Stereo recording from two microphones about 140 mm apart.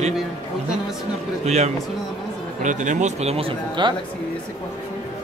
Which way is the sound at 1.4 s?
50° right (ahead or behind).